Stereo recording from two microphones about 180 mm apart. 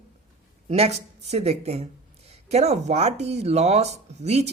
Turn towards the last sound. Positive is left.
turn(degrees=-35)  # may be behind; listen again after turning